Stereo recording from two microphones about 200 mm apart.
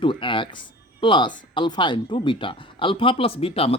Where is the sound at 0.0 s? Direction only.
25° left (ahead or behind).